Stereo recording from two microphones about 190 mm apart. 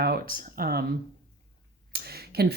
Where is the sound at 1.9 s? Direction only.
55° right (ahead or behind).